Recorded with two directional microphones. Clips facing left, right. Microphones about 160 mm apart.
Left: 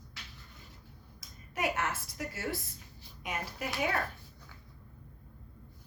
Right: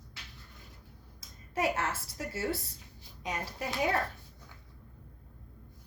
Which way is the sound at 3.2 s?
30° right (ahead or behind).